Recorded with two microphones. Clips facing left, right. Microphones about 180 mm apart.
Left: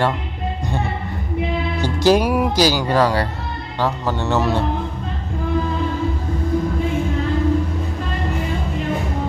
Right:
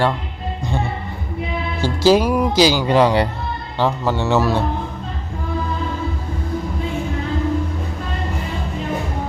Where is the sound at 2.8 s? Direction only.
20° right (ahead or behind).